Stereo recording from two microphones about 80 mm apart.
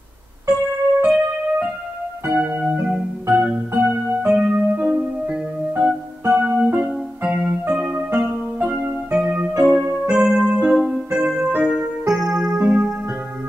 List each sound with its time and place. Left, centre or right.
1.0 s keyboard: centre
5.8 s music: centre
9.8 s keyboard: centre
12.1 s music: centre